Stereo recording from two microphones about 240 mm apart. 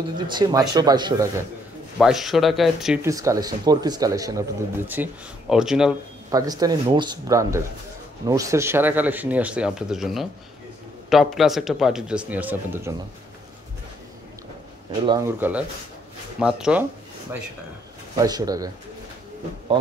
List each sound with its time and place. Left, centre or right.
0.3 s speech: centre
2.0 s speech: centre
6.3 s speech: centre
15.0 s speech: centre
18.1 s speech: centre